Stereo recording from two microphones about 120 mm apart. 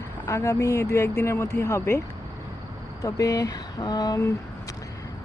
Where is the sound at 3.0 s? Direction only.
30° left (ahead or behind).